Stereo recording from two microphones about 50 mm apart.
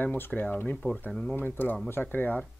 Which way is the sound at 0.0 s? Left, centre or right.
Left.